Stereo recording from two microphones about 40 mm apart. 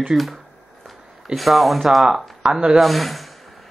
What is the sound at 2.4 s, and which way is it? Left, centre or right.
Speech, centre.